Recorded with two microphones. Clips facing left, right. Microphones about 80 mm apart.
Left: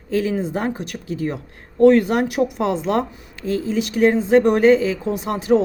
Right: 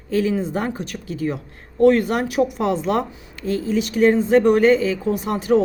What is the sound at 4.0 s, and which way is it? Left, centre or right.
Speech, centre.